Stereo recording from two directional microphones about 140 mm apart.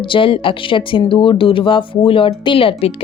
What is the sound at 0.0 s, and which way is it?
Speech, 35° left (ahead or behind).